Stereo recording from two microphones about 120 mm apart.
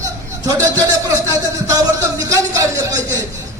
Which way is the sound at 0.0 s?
30° right (ahead or behind).